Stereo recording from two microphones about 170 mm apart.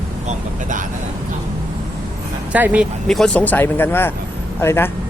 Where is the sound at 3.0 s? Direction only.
5° left (ahead or behind).